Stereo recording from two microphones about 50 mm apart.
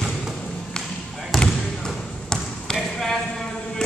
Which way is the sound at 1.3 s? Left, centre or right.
Centre.